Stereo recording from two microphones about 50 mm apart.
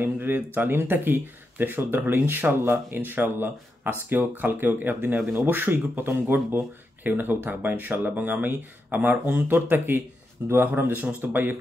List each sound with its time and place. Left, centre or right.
0.0 s speech: right